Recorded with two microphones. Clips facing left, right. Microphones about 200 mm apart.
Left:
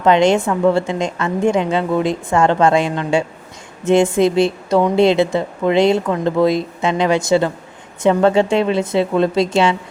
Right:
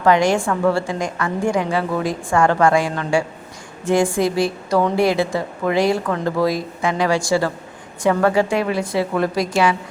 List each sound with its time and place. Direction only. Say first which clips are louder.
0.0 s a woman's voice: left 3 dB; 20° left (ahead or behind)